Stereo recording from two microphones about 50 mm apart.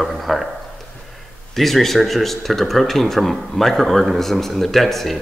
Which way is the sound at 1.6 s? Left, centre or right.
Centre.